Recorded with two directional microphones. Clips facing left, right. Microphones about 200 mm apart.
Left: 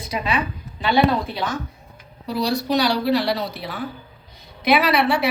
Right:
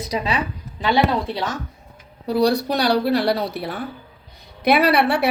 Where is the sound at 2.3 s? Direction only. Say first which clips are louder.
Right 4 dB; 55° right (ahead or behind).